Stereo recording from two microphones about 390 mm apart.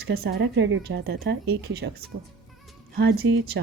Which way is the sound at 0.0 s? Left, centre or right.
Right.